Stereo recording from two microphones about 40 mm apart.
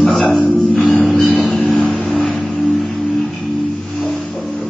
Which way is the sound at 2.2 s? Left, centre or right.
Left.